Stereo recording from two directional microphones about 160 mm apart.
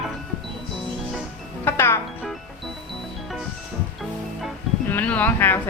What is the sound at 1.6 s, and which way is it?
Music, 15° left (ahead or behind).